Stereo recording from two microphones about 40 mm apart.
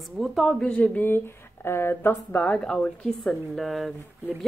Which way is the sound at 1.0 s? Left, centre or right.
Left.